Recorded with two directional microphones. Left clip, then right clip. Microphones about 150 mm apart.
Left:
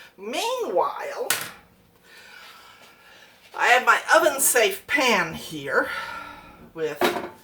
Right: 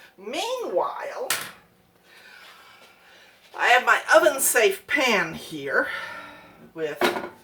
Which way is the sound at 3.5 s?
10° left (ahead or behind).